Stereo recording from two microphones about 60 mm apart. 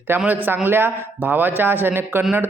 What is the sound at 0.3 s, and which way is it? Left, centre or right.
A man's voice, right.